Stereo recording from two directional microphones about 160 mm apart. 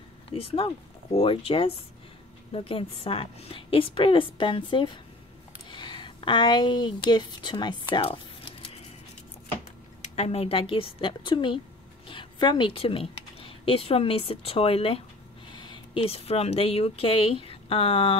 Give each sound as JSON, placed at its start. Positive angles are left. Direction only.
{"t": 0.3, "sound": "a woman's voice", "side_deg": 35}
{"t": 10.0, "sound": "a woman's voice", "side_deg": 45}